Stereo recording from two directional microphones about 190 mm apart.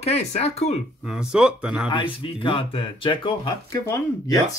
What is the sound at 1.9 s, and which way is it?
Speech, 25° left (ahead or behind).